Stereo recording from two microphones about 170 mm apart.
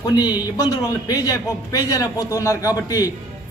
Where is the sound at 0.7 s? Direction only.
20° left (ahead or behind).